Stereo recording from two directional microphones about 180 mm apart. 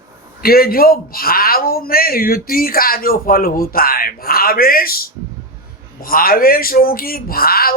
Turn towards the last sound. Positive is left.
turn(degrees=55)  # may be behind; listen again after turning